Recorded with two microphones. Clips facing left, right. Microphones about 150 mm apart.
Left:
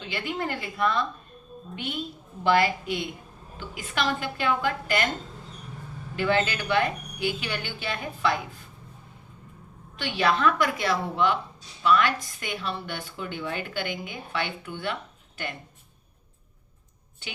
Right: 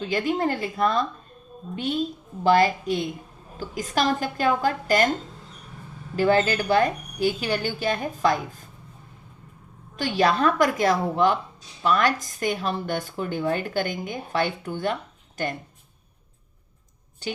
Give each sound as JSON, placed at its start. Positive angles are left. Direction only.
{"t": 0.0, "sound": "a woman's voice", "side_deg": -40}
{"t": 6.1, "sound": "a woman's voice", "side_deg": -40}
{"t": 10.0, "sound": "a woman's voice", "side_deg": -40}